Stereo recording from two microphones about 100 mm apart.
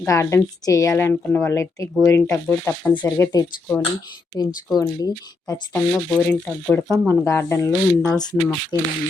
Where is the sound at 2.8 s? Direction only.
15° left (ahead or behind).